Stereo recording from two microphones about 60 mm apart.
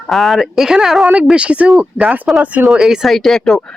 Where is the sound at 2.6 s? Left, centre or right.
Centre.